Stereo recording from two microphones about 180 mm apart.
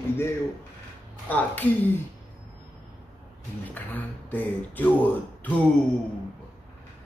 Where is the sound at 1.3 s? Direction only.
10° left (ahead or behind).